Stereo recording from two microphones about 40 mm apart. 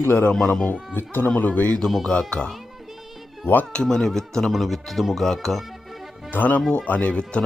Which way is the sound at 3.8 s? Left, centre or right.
Centre.